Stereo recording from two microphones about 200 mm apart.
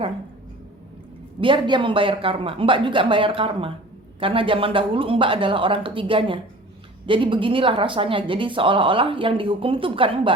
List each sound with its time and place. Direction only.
1.4 s speech: 25° right (ahead or behind)